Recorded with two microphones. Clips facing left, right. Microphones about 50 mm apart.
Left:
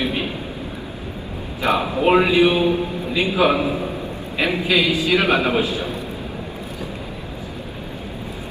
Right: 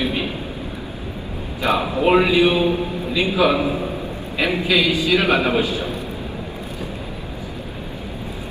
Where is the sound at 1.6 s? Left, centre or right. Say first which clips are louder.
Even; left.